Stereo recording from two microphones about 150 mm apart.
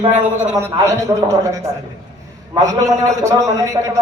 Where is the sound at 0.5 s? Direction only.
20° right (ahead or behind).